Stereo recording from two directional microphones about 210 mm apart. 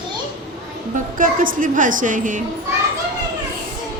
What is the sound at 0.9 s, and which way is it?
A woman's voice, 40° right (ahead or behind).